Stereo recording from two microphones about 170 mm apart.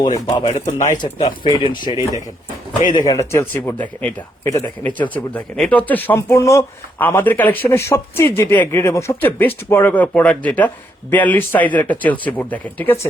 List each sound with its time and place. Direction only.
0.0 s speech: 25° left (ahead or behind)
0.6 s speech: 50° left (ahead or behind)
1.5 s speech: 25° left (ahead or behind)